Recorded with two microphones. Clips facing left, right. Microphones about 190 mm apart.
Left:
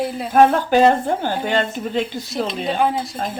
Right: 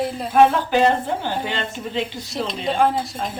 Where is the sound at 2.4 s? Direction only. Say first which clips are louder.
Right 1 dB; centre (ahead or behind).